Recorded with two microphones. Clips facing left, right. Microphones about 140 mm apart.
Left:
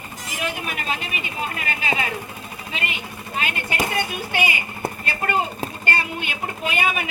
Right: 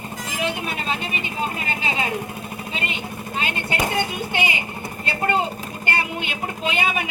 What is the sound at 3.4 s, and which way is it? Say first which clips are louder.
A woman's voice: right 1 dB; 25° right (ahead or behind).